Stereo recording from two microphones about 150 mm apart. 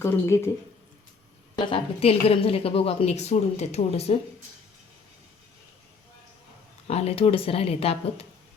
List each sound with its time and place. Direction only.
0.0 s speech: 20° left (ahead or behind)
1.5 s a woman's voice: 40° left (ahead or behind)
6.8 s a woman's voice: 45° left (ahead or behind)